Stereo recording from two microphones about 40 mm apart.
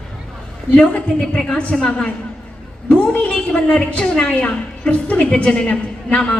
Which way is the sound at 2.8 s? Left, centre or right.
Left.